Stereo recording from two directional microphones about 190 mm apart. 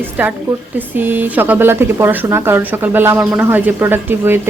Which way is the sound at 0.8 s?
10° right (ahead or behind).